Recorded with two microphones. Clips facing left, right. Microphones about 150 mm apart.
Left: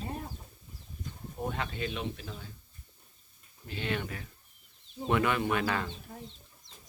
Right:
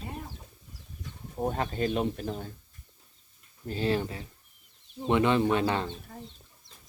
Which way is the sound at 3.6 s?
35° right (ahead or behind).